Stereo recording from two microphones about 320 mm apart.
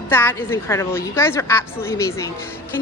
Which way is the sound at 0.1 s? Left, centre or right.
Centre.